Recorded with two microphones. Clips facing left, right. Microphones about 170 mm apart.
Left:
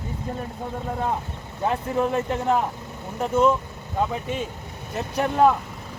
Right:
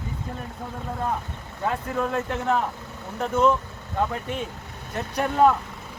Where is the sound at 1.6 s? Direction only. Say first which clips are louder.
Left 3 dB; 20° left (ahead or behind); by 5.5 s 5° left (ahead or behind).